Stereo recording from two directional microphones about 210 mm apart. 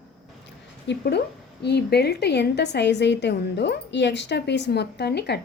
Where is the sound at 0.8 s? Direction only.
55° left (ahead or behind).